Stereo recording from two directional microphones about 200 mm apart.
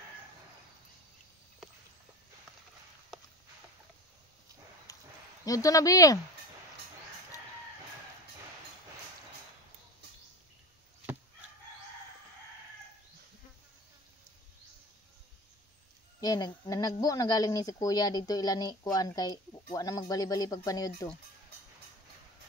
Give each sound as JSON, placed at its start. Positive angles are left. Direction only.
{"t": 4.9, "sound": "a sound", "side_deg": 15}
{"t": 5.4, "sound": "speech", "side_deg": 15}
{"t": 16.2, "sound": "speech", "side_deg": 20}